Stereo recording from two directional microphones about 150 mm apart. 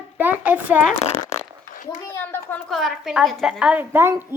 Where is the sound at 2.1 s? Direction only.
15° left (ahead or behind).